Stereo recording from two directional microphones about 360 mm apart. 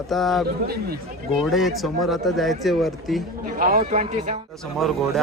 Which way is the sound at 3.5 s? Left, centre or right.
Right.